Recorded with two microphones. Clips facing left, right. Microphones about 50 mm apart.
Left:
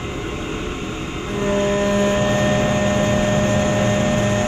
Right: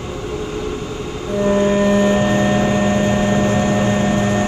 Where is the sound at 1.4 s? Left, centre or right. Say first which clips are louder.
Right 4 dB; right.